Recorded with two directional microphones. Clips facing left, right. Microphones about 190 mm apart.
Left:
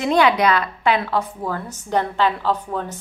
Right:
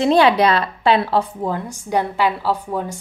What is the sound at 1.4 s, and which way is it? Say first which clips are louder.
A woman's voice: right 3 dB; 15° right (ahead or behind).